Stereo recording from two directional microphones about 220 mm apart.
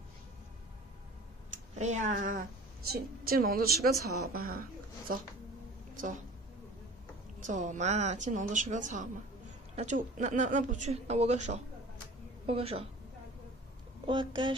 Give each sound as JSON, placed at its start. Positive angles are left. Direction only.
{"t": 1.8, "sound": "a woman's voice", "side_deg": -30}
{"t": 7.4, "sound": "speech", "side_deg": -35}
{"t": 14.0, "sound": "speech", "side_deg": -20}